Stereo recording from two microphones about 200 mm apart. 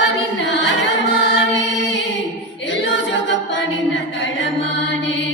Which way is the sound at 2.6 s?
65° left (ahead or behind).